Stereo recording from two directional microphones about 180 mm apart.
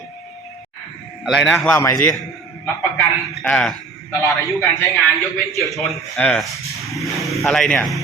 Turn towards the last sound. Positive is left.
turn(degrees=5)  # may be behind; listen again after turning